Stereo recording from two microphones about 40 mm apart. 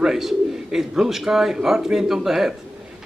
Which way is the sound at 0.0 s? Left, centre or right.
Centre.